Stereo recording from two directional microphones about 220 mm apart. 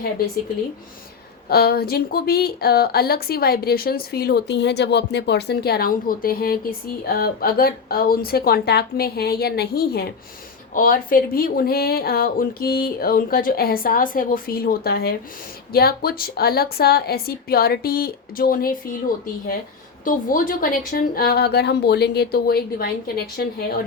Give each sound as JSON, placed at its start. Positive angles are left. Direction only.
{"t": 1.5, "sound": "speech", "side_deg": 45}